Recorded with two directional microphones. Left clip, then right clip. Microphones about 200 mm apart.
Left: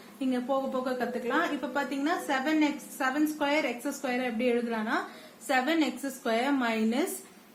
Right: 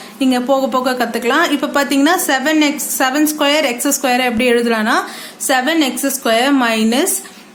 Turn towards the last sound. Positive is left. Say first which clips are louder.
# right 14 dB
turn(degrees=-35)  # may be behind; listen again after turning